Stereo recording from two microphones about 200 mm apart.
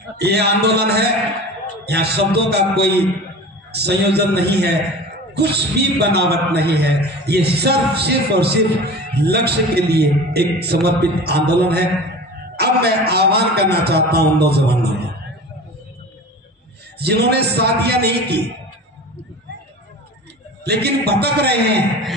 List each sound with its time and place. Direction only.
0.2 s a man's voice: 55° right (ahead or behind)
12.5 s a man's voice: 55° right (ahead or behind)
17.0 s a man's voice: 55° right (ahead or behind)
20.6 s a man's voice: 55° right (ahead or behind)